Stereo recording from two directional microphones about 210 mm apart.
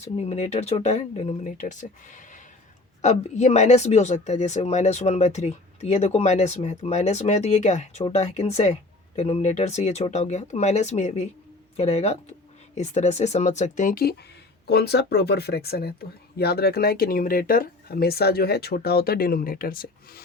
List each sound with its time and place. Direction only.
0.0 s speech: 30° left (ahead or behind)